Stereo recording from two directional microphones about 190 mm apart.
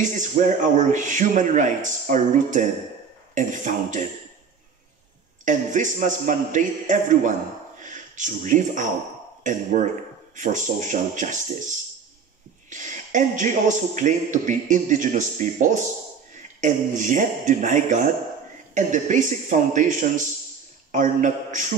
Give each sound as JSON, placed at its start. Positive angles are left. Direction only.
{"t": 0.0, "sound": "a man's voice", "side_deg": -40}
{"t": 5.4, "sound": "a man's voice", "side_deg": -40}